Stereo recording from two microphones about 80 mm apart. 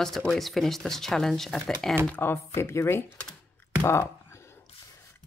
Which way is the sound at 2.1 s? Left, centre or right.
Left.